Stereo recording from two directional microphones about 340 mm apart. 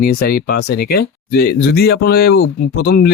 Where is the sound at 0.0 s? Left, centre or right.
Left.